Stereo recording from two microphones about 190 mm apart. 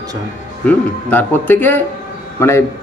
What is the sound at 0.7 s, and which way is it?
A man's voice, 10° left (ahead or behind).